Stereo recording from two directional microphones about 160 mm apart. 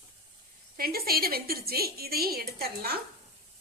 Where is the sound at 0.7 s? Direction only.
70° right (ahead or behind).